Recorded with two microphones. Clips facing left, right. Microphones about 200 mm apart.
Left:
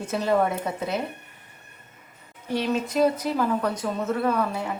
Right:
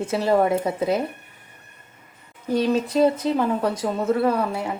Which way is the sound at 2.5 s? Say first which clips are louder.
Right 4 dB; 35° right (ahead or behind).